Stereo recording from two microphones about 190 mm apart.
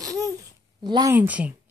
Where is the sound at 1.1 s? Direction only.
10° right (ahead or behind).